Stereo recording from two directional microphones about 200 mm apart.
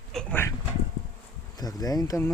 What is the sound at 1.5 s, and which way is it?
Speech, 20° left (ahead or behind).